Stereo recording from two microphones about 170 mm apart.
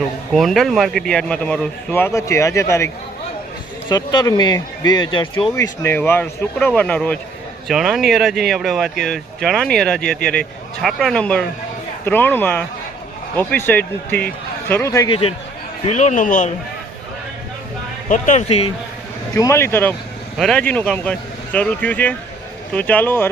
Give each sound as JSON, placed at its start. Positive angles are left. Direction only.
{"t": 0.3, "sound": "speech", "side_deg": 0}
{"t": 15.8, "sound": "a man's voice", "side_deg": 40}
{"t": 18.1, "sound": "a man's voice", "side_deg": 45}
{"t": 19.3, "sound": "speech", "side_deg": 20}